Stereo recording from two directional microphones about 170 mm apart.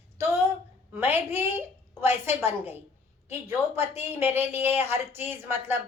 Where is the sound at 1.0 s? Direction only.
10° right (ahead or behind).